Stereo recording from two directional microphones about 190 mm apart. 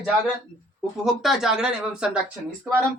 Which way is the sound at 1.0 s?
Centre (ahead or behind).